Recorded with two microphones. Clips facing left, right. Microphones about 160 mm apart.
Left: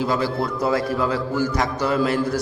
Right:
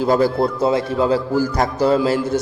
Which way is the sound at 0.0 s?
45° right (ahead or behind).